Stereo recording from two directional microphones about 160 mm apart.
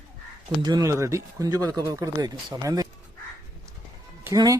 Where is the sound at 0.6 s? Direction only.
25° right (ahead or behind).